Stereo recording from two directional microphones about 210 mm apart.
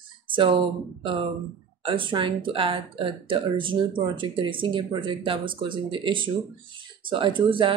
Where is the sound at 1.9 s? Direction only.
25° right (ahead or behind).